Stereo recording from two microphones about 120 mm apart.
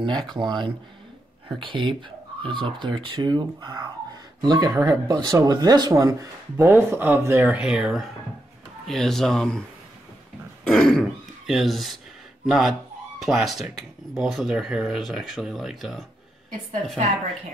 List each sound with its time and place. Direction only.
0.3 s speech: 40° right (ahead or behind); by 7.6 s 15° right (ahead or behind)
7.6 s speech: 5° right (ahead or behind)
10.6 s speech: 5° left (ahead or behind)